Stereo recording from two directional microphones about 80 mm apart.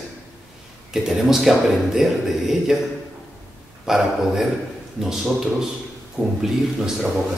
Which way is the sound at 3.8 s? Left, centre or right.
Centre.